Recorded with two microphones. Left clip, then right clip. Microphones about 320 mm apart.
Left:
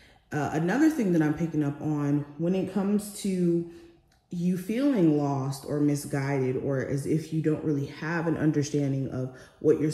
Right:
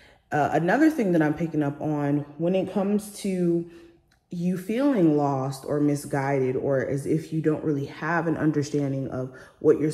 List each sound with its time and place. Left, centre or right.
0.3 s speech: centre
9.6 s speech: right